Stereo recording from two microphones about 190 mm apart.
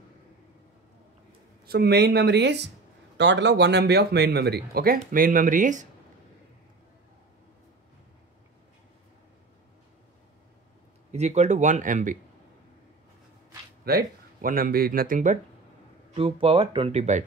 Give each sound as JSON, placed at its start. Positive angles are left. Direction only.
{"t": 1.7, "sound": "speech", "side_deg": -55}
{"t": 11.1, "sound": "speech", "side_deg": -35}
{"t": 13.8, "sound": "speech", "side_deg": -50}
{"t": 16.2, "sound": "speech", "side_deg": -30}